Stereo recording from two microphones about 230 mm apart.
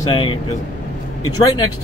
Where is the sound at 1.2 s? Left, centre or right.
Centre.